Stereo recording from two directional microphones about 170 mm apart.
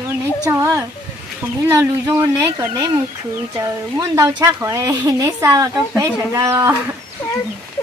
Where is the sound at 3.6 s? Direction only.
20° right (ahead or behind).